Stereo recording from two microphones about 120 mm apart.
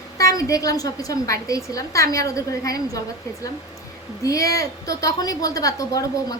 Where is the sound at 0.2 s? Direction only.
25° left (ahead or behind).